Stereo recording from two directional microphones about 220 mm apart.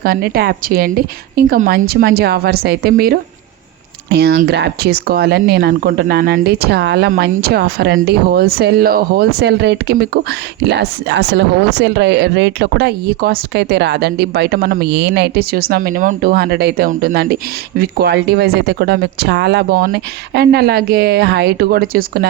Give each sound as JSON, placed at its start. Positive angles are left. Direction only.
{"t": 0.0, "sound": "speech", "side_deg": -45}